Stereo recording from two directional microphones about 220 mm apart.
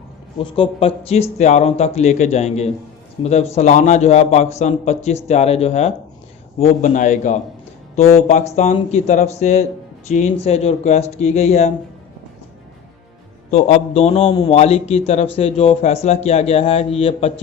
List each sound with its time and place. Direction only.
0.3 s speech: 25° left (ahead or behind)
13.5 s speech: 30° left (ahead or behind)